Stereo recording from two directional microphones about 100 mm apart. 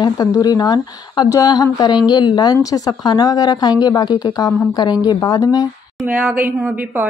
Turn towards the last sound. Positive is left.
turn(degrees=-15)  # may be behind; listen again after turning